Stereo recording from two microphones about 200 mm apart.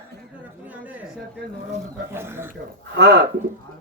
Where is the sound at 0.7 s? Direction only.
10° right (ahead or behind).